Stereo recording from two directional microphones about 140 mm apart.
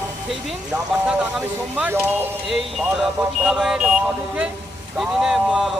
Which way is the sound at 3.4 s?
5° right (ahead or behind).